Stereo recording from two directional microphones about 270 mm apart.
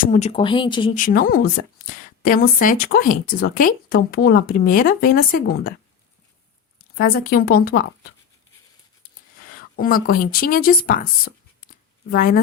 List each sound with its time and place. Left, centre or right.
0.0 s speech: left
0.9 s speech: left
6.9 s speech: left
9.5 s speech: left